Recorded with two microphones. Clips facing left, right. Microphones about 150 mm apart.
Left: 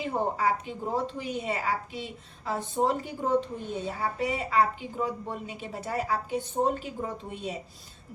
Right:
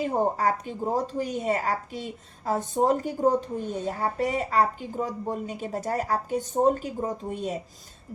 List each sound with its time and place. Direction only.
0.0 s a woman's voice: 45° right (ahead or behind)